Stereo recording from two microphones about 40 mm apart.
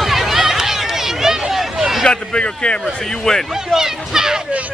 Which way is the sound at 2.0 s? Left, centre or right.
Left.